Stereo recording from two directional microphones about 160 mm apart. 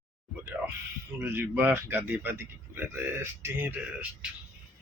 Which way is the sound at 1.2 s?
15° right (ahead or behind).